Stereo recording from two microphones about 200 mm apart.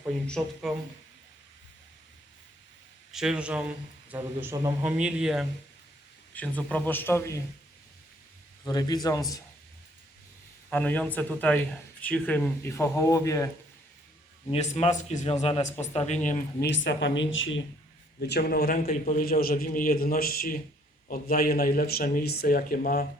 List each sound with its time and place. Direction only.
0.0 s speech: centre (ahead or behind)
3.1 s a man's voice: 5° right (ahead or behind)
6.3 s speech: 5° left (ahead or behind)
8.6 s speech: 20° left (ahead or behind)
10.7 s speech: 10° left (ahead or behind)
14.5 s a man's voice: 35° left (ahead or behind)
16.6 s speech: 60° left (ahead or behind)
18.2 s speech: 55° left (ahead or behind)